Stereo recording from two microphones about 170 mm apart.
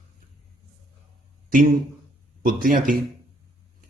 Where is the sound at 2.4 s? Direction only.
55° right (ahead or behind).